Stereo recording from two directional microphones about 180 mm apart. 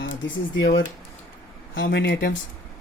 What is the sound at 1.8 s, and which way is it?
Speech, 60° left (ahead or behind).